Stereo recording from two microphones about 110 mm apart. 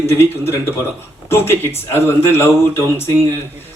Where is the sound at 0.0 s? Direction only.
25° left (ahead or behind).